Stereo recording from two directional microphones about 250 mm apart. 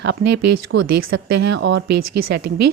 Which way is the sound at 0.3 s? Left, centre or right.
Right.